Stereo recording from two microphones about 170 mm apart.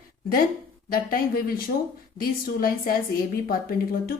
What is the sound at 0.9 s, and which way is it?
A woman's voice, 60° left (ahead or behind).